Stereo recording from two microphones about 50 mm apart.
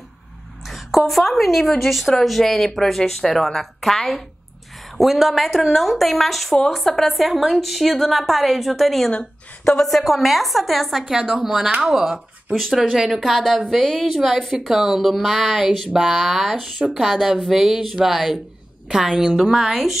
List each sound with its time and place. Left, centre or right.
0.7 s a woman's voice: centre
16.5 s speech: right
16.9 s a woman's voice: centre